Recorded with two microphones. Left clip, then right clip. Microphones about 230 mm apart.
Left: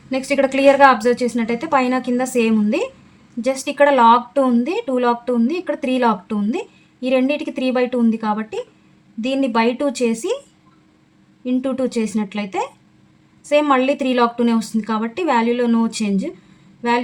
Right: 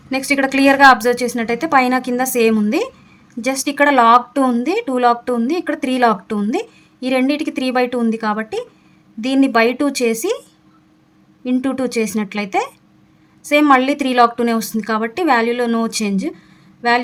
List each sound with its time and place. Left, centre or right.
0.1 s speech: right
11.4 s speech: right